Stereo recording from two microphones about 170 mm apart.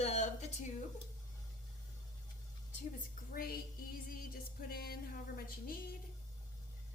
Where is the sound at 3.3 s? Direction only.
60° left (ahead or behind).